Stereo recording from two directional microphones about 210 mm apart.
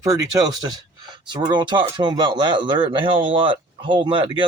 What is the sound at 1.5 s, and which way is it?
Speech, 20° right (ahead or behind).